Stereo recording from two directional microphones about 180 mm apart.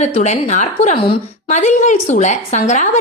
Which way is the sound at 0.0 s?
40° left (ahead or behind).